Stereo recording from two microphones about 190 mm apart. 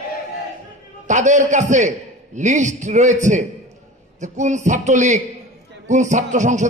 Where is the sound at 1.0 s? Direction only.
40° right (ahead or behind).